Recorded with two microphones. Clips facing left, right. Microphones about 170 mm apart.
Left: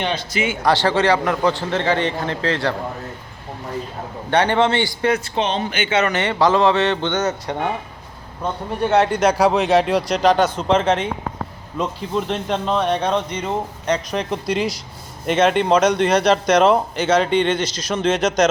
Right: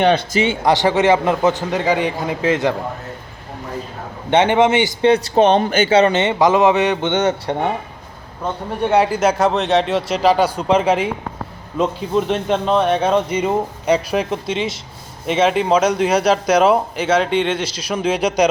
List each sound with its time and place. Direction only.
0.6 s a man's voice: 20° right (ahead or behind)
4.3 s a man's voice: 20° right (ahead or behind)
5.3 s speech: 55° right (ahead or behind)
5.8 s a man's voice: 35° right (ahead or behind)
8.9 s speech: 5° right (ahead or behind)
12.3 s a man's voice: 5° right (ahead or behind)